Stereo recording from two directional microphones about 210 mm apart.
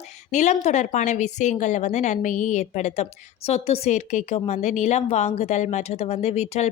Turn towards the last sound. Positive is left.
turn(degrees=30)  # may be behind; listen again after turning